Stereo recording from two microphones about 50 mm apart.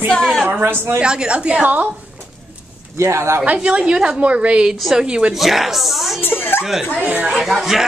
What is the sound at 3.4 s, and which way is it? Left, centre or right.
Speech, right.